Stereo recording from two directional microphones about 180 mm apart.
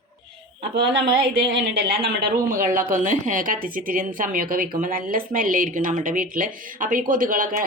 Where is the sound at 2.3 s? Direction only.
50° right (ahead or behind).